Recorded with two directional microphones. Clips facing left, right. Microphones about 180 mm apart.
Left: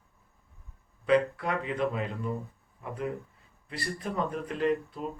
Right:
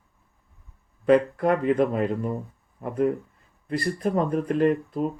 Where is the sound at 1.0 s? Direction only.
50° right (ahead or behind).